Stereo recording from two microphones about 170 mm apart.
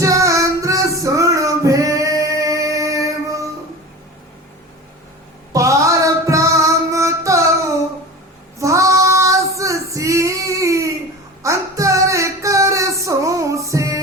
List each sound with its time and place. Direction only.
0.0 s music: 20° right (ahead or behind)
5.5 s music: 20° right (ahead or behind)
8.5 s female singing: 20° right (ahead or behind)
11.4 s music: 20° right (ahead or behind)